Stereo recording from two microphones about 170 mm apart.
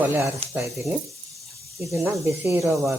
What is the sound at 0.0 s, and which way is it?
Speech, 10° right (ahead or behind).